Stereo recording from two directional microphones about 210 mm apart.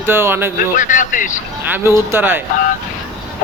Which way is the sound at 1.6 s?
10° right (ahead or behind).